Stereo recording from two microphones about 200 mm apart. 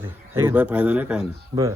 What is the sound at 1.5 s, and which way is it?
Speech, 30° right (ahead or behind).